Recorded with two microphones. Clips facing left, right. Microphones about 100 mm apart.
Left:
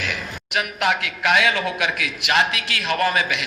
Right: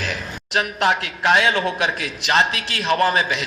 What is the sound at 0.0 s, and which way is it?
A man's voice, 35° right (ahead or behind).